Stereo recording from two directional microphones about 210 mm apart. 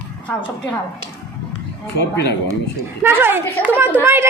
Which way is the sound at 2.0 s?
55° left (ahead or behind).